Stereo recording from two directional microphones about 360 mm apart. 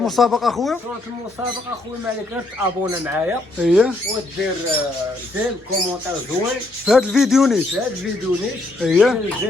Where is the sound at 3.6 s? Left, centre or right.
Centre.